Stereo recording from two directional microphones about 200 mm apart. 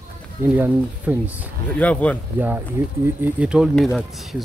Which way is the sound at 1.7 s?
5° left (ahead or behind).